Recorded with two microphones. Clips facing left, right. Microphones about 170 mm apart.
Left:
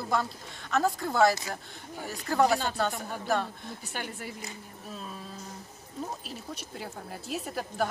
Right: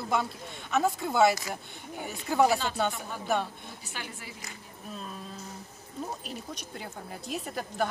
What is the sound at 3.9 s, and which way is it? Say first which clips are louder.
Speech: left 4 dB; 50° left (ahead or behind).